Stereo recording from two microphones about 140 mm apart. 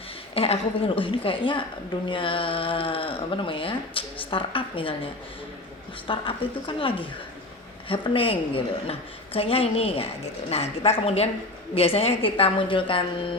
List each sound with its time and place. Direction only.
0.3 s speech: 45° left (ahead or behind)
6.1 s a woman's voice: 40° left (ahead or behind)